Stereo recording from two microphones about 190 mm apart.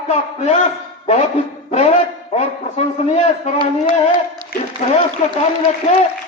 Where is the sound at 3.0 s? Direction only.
35° left (ahead or behind).